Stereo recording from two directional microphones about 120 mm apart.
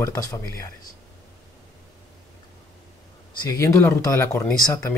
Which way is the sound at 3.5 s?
25° left (ahead or behind).